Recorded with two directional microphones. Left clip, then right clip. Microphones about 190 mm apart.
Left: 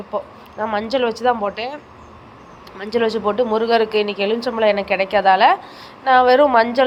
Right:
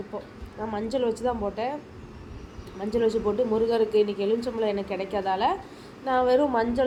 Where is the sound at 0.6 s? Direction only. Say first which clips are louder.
Left 8 dB; 15° left (ahead or behind).